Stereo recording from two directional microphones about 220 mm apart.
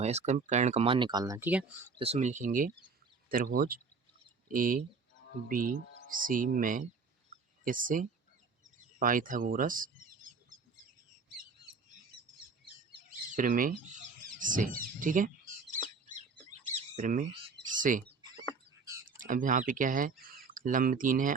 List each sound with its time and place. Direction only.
0.0 s speech: 30° right (ahead or behind); by 1.9 s 10° right (ahead or behind)
2.0 s speech: 30° right (ahead or behind)
13.1 s bird: 35° right (ahead or behind)
17.7 s speech: 35° right (ahead or behind)
18.2 s bird: 20° right (ahead or behind)
19.2 s speech: 35° right (ahead or behind)